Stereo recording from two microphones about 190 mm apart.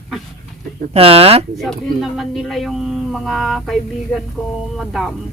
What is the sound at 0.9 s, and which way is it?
Speech, 30° right (ahead or behind).